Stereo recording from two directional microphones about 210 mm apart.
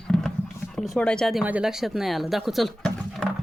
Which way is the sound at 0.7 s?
Centre (ahead or behind).